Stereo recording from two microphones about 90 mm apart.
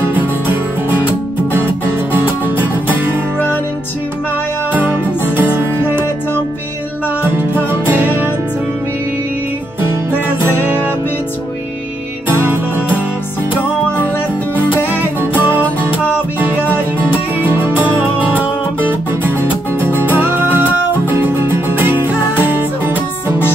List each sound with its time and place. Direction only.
4.7 s music: 20° right (ahead or behind)
8.0 s music: 20° right (ahead or behind)
10.2 s music: 25° left (ahead or behind)
14.6 s music: 20° left (ahead or behind)
15.3 s music: 20° right (ahead or behind)
17.4 s music: 25° right (ahead or behind)
19.8 s music: 25° right (ahead or behind)